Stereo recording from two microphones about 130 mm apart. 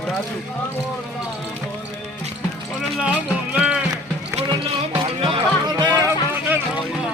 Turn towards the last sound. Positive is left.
turn(degrees=-20)  # may be behind; listen again after turning